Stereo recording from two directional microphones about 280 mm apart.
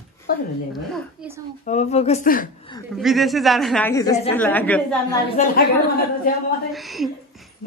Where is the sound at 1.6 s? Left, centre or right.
Left.